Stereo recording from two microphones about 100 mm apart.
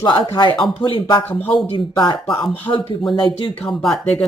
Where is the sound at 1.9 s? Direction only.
50° left (ahead or behind).